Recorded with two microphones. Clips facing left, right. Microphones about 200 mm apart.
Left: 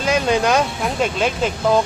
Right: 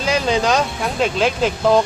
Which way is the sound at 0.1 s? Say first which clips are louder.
Left 1 dB; 5° left (ahead or behind).